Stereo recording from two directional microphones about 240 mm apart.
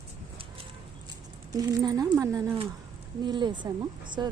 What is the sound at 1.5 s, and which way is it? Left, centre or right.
Speech, centre.